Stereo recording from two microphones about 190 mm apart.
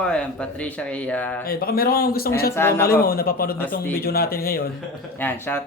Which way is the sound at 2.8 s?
50° left (ahead or behind).